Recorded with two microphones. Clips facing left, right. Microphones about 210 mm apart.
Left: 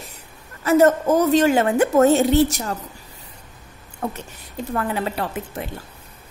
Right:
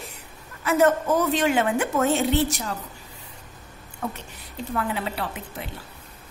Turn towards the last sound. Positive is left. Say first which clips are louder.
# left 4 dB
turn(degrees=45)  # may be behind; listen again after turning